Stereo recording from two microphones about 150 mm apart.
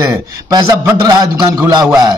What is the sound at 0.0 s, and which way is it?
A man's voice, 25° right (ahead or behind).